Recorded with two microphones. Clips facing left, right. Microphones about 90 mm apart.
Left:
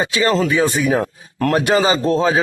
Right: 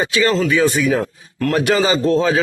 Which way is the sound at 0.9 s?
45° left (ahead or behind).